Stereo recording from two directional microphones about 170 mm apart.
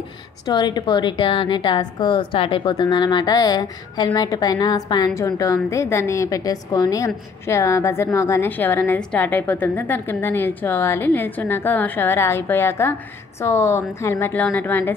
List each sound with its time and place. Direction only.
0.5 s a woman's voice: 25° left (ahead or behind)